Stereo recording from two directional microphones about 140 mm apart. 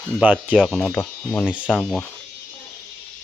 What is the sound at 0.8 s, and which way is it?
Speech, 15° left (ahead or behind).